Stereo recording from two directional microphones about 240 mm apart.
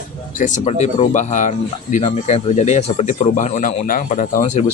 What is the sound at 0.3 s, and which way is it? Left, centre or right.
Speech, left.